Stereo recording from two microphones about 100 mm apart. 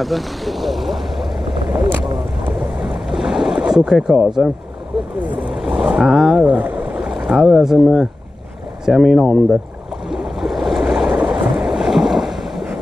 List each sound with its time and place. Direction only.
0.0 s boat: centre (ahead or behind)
5.5 s speech: centre (ahead or behind)
6.4 s speech: 15° right (ahead or behind)
10.0 s boat: centre (ahead or behind)